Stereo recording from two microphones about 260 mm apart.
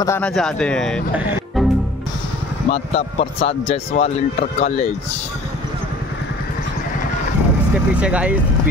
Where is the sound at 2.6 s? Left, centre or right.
Left.